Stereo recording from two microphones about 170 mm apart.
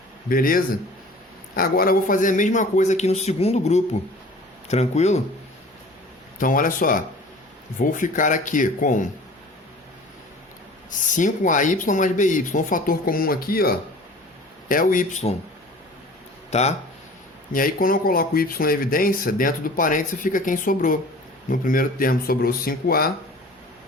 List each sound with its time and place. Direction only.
0.3 s speech: 55° left (ahead or behind); by 5.2 s 40° left (ahead or behind)
6.4 s speech: 55° left (ahead or behind)
10.9 s speech: 50° left (ahead or behind)
16.5 s speech: 40° left (ahead or behind)
17.5 s speech: 55° left (ahead or behind)